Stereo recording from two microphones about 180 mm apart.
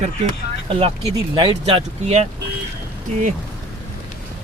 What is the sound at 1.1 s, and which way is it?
Speech, 30° right (ahead or behind).